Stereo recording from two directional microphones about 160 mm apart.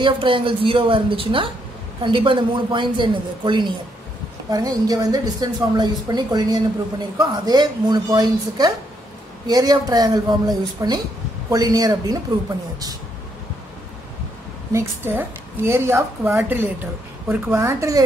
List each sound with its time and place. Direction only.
0.0 s a woman's voice: 30° right (ahead or behind)
14.7 s a woman's voice: 15° right (ahead or behind)